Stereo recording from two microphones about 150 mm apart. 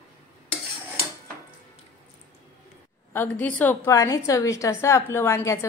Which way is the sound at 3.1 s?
10° left (ahead or behind).